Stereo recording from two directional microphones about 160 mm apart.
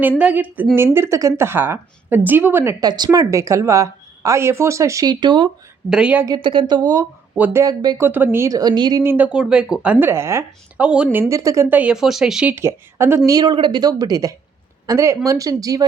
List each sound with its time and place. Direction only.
0.2 s speech: 10° right (ahead or behind)
2.8 s a woman's voice: 25° right (ahead or behind)
5.9 s speech: 5° right (ahead or behind)
6.2 s a woman's voice: 25° right (ahead or behind)
7.3 s speech: 10° right (ahead or behind)
7.6 s a woman's voice: 25° right (ahead or behind)
9.1 s a woman's voice: 5° right (ahead or behind); by 15.9 s 25° right (ahead or behind)